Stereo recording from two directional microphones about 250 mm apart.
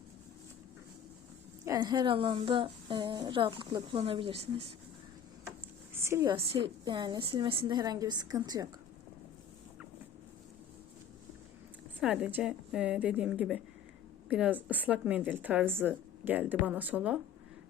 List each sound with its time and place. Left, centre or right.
1.6 s a woman's voice: centre
5.9 s a sound: centre
6.3 s speech: right
11.9 s a woman's voice: centre